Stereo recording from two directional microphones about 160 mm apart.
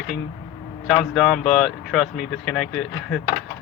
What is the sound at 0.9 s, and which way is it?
Speech, centre (ahead or behind).